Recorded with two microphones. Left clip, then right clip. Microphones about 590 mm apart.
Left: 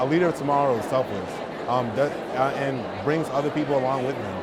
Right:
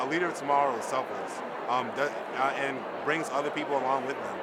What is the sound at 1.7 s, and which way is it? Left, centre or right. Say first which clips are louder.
Speech: left 6 dB; left.